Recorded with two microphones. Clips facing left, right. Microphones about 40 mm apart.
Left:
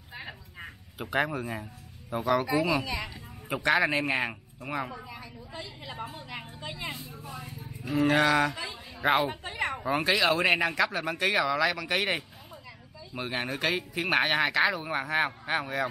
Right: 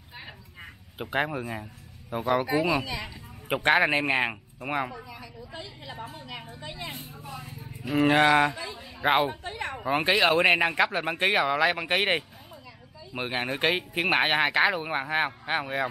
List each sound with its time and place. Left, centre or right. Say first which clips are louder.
1.0 s speech: even; centre
2.4 s speech: right 1 dB; right
4.1 s speech: right 3 dB; right
6.1 s a woman's voice: even; centre
7.8 s speech: right 3 dB; right
9.4 s a sound: left 2 dB; centre
9.8 s speech: right 3 dB; right